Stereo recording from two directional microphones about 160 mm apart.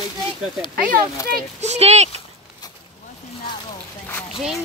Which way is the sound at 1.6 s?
45° right (ahead or behind).